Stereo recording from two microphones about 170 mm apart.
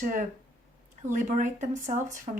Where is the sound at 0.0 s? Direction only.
50° right (ahead or behind).